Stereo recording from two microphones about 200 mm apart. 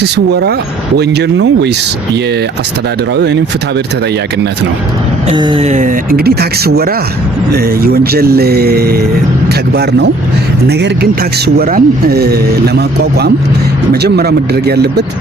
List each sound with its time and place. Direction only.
0.0 s speech: 55° right (ahead or behind)
5.3 s speech: 25° right (ahead or behind); by 9.0 s 50° right (ahead or behind)
10.7 s speech: 55° right (ahead or behind)